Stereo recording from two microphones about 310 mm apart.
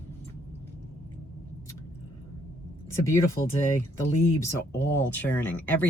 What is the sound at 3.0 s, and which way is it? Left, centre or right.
Speech, centre.